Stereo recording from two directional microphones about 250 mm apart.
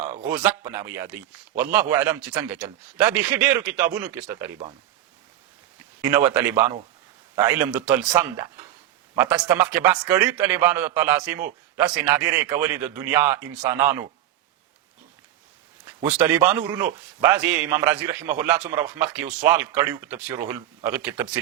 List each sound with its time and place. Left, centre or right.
0.3 s a man's voice: centre
6.0 s a man's voice: centre
16.1 s a man's voice: centre